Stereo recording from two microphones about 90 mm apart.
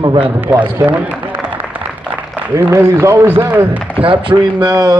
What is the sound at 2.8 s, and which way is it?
A man's voice, 30° right (ahead or behind).